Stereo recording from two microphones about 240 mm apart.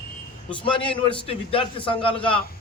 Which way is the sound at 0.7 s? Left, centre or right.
Left.